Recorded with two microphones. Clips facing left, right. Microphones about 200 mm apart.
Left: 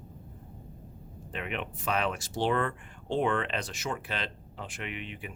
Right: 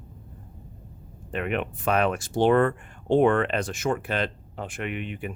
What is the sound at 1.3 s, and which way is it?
Speech, 55° right (ahead or behind).